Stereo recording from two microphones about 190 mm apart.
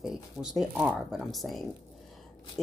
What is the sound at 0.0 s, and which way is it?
Speech, 5° right (ahead or behind).